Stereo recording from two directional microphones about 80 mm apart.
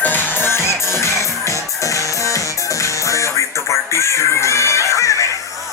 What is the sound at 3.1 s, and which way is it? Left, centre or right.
Music, left.